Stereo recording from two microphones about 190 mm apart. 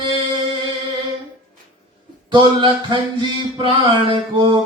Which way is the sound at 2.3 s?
25° right (ahead or behind).